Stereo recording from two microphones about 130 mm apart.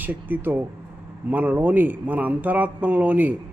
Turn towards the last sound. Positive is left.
turn(degrees=-15)  # may be behind; listen again after turning